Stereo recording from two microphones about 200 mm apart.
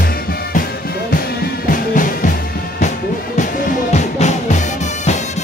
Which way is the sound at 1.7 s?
40° left (ahead or behind).